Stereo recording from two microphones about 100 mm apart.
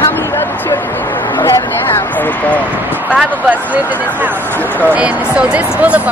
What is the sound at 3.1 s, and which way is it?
Speech, 10° right (ahead or behind).